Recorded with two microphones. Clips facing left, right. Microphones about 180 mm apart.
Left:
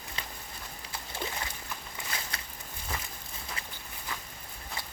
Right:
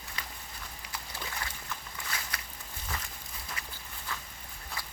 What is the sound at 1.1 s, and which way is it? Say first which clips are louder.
Boat: left 5 dB; 25° left (ahead or behind).